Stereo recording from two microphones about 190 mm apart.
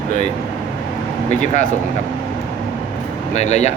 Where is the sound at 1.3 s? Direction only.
40° left (ahead or behind).